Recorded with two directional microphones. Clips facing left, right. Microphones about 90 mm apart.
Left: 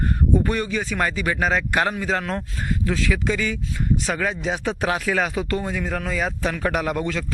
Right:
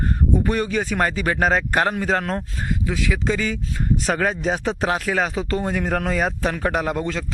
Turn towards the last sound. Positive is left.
turn(degrees=-30)  # may be behind; listen again after turning